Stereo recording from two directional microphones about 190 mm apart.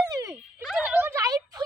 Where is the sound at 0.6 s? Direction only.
Centre (ahead or behind); by 1.6 s 20° right (ahead or behind).